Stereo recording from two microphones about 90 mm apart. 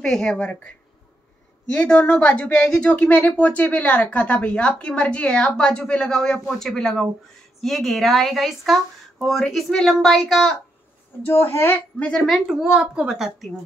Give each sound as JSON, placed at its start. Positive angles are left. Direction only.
{"t": 0.0, "sound": "speech", "side_deg": 5}
{"t": 11.2, "sound": "a woman's voice", "side_deg": 25}
{"t": 12.3, "sound": "speech", "side_deg": 0}